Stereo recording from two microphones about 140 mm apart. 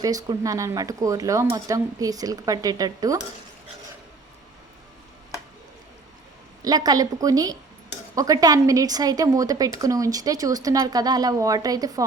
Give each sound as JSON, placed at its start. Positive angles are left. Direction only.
{"t": 0.0, "sound": "a woman's voice", "side_deg": -25}
{"t": 6.7, "sound": "a woman's voice", "side_deg": -30}